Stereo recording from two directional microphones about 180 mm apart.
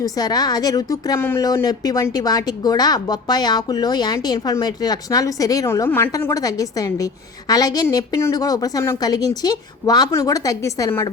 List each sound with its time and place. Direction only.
0.0 s a woman's voice: 20° left (ahead or behind)